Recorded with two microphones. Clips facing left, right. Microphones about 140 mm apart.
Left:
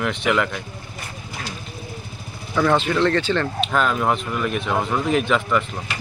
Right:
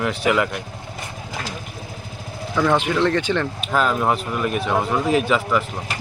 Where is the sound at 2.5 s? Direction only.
5° left (ahead or behind).